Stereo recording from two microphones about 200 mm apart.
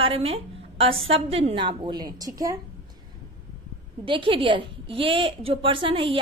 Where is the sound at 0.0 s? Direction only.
30° right (ahead or behind).